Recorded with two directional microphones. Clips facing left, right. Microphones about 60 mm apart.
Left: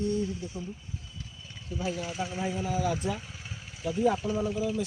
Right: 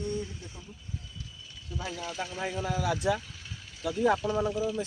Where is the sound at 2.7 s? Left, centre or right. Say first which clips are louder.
Right 3 dB; right.